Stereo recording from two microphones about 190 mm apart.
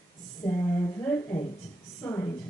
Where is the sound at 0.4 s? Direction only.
15° left (ahead or behind).